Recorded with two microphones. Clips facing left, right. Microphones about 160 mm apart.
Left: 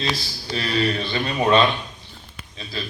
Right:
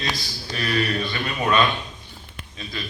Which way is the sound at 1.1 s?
25° left (ahead or behind).